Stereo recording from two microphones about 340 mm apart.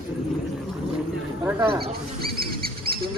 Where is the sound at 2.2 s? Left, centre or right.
Right.